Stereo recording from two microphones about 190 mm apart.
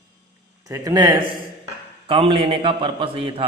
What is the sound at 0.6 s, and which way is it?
A man's voice, 15° right (ahead or behind).